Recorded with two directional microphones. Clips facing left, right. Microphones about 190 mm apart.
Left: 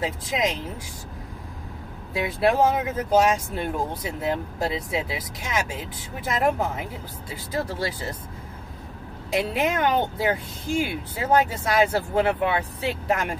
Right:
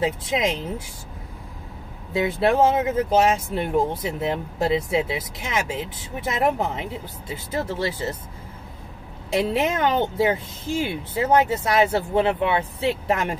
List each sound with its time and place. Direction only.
0.0 s speech: 25° right (ahead or behind)
2.1 s speech: 25° right (ahead or behind)
9.3 s speech: 25° right (ahead or behind)